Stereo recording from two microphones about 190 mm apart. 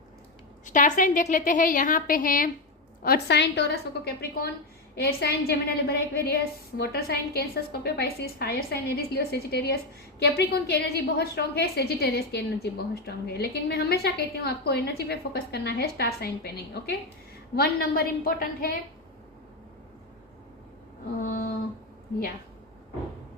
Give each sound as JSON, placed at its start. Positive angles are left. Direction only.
{"t": 0.6, "sound": "a woman's voice", "side_deg": 40}
{"t": 3.0, "sound": "a woman's voice", "side_deg": 55}
{"t": 21.2, "sound": "a woman's voice", "side_deg": 45}